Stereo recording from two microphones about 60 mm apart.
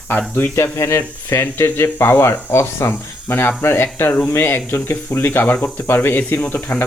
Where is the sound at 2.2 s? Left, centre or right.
Left.